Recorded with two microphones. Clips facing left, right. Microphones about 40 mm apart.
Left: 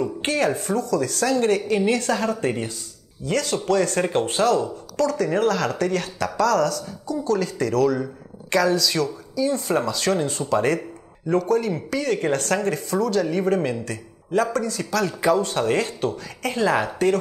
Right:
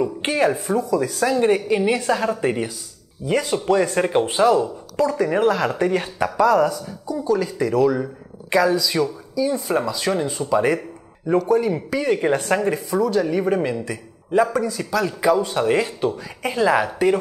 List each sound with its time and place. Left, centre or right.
0.0 s speech: centre